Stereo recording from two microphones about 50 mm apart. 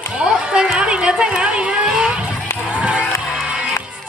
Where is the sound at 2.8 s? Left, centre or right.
Right.